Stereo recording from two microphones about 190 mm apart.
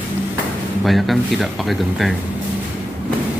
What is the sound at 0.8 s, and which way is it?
Speech, centre (ahead or behind).